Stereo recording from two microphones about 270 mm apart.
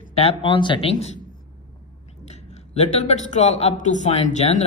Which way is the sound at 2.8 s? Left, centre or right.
Left.